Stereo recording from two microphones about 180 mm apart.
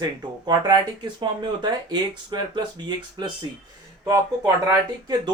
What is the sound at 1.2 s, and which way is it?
Speech, 25° right (ahead or behind).